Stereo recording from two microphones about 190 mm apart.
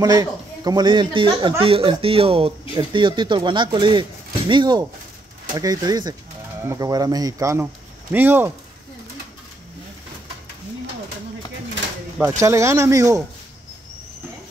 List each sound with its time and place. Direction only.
0.0 s speech: 20° right (ahead or behind)
12.2 s speech: 15° right (ahead or behind)